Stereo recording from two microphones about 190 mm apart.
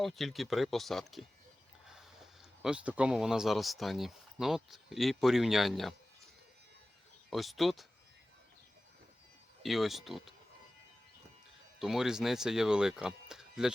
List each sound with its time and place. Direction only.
0.0 s speech: centre (ahead or behind)
7.3 s speech: centre (ahead or behind)
9.6 s speech: centre (ahead or behind)
11.8 s speech: centre (ahead or behind)